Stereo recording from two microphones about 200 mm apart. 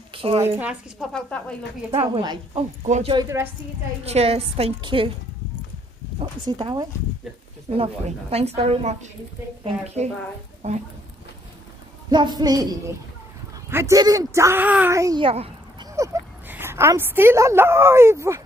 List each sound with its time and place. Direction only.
0.1 s a sound: 30° right (ahead or behind)
0.6 s speech: 5° right (ahead or behind)
1.9 s a woman's voice: 25° right (ahead or behind)
4.0 s a woman's voice: 30° right (ahead or behind)
6.1 s a woman's voice: 20° right (ahead or behind)
12.1 s a woman's voice: 20° right (ahead or behind)
16.0 s speech: 15° right (ahead or behind)